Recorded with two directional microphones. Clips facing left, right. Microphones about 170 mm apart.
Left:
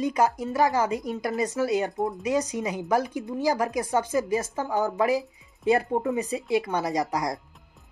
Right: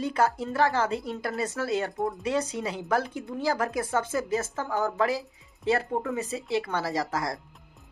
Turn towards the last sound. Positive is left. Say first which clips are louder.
# left 3 dB
turn(degrees=20)  # may be behind; listen again after turning